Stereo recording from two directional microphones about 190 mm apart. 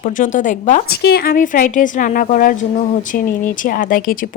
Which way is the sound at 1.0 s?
55° left (ahead or behind).